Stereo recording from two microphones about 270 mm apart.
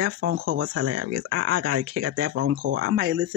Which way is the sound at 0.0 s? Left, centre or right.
Right.